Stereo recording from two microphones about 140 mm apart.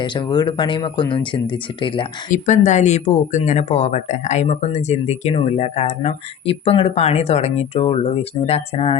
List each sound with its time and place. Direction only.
0.0 s speech: 35° left (ahead or behind)
2.3 s speech: 60° left (ahead or behind); by 9.0 s 45° left (ahead or behind)